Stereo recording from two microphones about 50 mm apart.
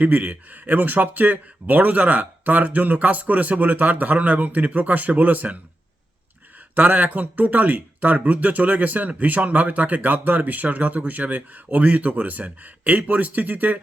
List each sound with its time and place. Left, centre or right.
0.0 s speech: right
6.7 s speech: right